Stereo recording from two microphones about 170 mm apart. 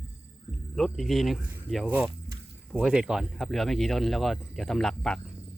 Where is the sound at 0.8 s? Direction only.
Centre (ahead or behind).